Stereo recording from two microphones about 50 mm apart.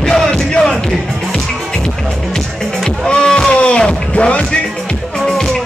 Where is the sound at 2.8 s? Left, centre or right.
Centre.